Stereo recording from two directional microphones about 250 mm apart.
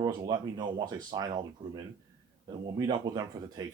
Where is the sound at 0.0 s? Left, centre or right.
Centre.